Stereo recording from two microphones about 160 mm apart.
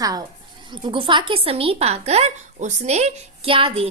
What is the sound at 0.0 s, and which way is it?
A woman's voice, 25° right (ahead or behind).